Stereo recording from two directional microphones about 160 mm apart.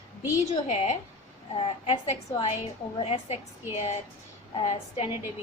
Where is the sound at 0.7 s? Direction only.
40° left (ahead or behind).